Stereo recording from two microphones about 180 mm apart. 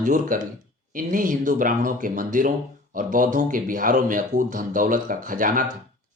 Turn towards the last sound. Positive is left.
turn(degrees=-50)  # may be behind; listen again after turning